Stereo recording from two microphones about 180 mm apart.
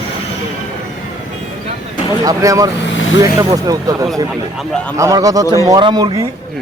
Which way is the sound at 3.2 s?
20° right (ahead or behind).